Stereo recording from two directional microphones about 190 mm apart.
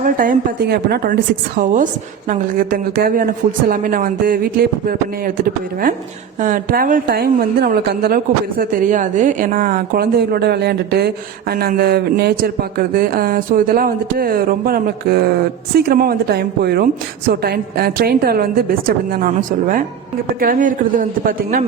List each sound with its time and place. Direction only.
0.0 s a woman's voice: 45° right (ahead or behind)
6.4 s a woman's voice: 45° right (ahead or behind)